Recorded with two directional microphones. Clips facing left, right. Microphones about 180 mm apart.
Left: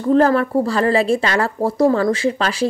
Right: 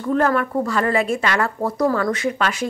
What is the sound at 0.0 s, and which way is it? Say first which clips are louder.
A woman's voice: left 5 dB; 30° left (ahead or behind).